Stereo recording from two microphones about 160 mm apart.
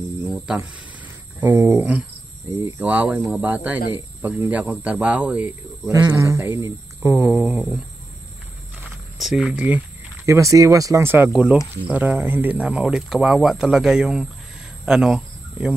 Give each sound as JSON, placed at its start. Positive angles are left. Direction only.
{"t": 0.2, "sound": "a sound", "side_deg": -10}
{"t": 1.4, "sound": "speech", "side_deg": -10}
{"t": 5.9, "sound": "speech", "side_deg": -20}
{"t": 7.2, "sound": "speech", "side_deg": -5}
{"t": 9.2, "sound": "speech", "side_deg": 0}